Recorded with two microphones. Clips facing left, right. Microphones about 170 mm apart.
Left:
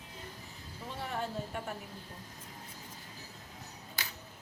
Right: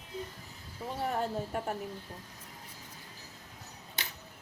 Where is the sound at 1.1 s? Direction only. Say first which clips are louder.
Right 3 dB; 40° right (ahead or behind).